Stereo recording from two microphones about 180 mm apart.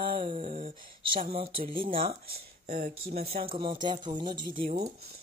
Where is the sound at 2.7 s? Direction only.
60° right (ahead or behind).